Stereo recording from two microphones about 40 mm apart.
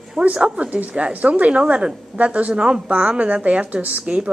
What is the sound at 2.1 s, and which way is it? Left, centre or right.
A woman's voice, right.